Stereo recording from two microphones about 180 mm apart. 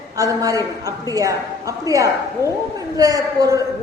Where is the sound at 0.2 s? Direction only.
20° right (ahead or behind).